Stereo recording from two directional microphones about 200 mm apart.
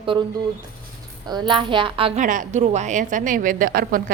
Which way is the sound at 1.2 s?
20° right (ahead or behind).